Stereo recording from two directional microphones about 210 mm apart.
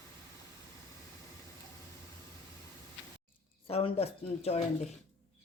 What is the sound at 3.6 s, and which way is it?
Speech, 30° left (ahead or behind).